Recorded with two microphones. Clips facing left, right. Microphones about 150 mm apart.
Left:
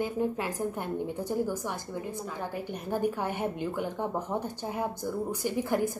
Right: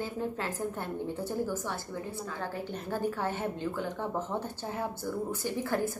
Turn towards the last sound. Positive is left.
turn(degrees=15)  # may be behind; listen again after turning